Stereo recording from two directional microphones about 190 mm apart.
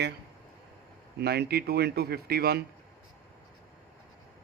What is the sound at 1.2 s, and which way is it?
A man's voice, 55° right (ahead or behind).